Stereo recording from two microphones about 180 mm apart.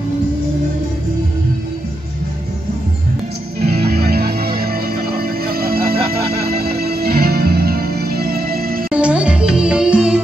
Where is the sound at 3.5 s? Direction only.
60° right (ahead or behind).